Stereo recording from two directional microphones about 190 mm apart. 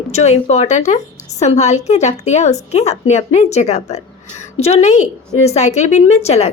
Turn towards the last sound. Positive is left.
turn(degrees=35)  # may be behind; listen again after turning